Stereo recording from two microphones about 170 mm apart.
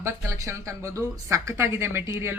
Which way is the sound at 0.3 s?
20° right (ahead or behind).